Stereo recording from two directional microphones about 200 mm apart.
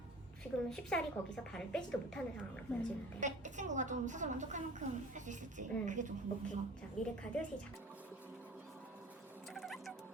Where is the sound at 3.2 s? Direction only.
40° right (ahead or behind).